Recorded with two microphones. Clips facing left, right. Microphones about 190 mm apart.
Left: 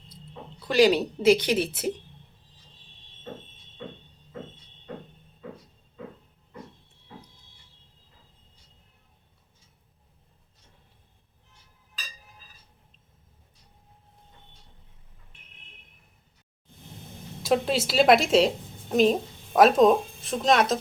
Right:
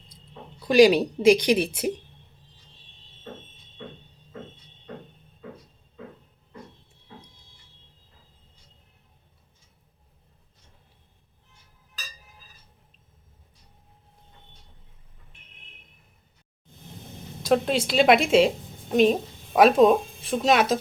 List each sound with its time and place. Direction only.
0.6 s speech: 15° right (ahead or behind)
17.4 s a woman's voice: 5° left (ahead or behind)